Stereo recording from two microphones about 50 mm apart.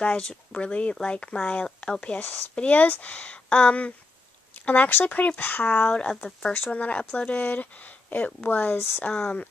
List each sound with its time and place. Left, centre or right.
0.6 s speech: left
2.1 s speech: left
2.5 s speech: left
4.6 s speech: left
5.9 s speech: centre
6.7 s speech: left
7.4 s speech: left
9.1 s speech: left